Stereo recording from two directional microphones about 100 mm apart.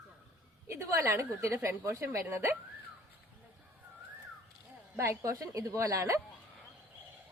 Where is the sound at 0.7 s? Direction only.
30° right (ahead or behind).